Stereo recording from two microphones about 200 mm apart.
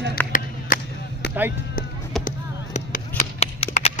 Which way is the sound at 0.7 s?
40° left (ahead or behind).